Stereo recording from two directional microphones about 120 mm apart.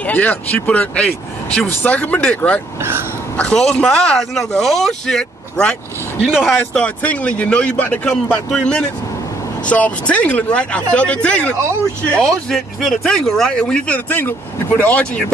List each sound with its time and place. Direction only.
0.0 s speech: 15° left (ahead or behind)
2.8 s speech: 20° right (ahead or behind)
3.3 s speech: 10° left (ahead or behind)